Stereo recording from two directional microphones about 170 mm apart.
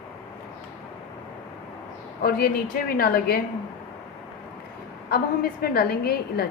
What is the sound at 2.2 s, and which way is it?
A woman's voice, 60° left (ahead or behind).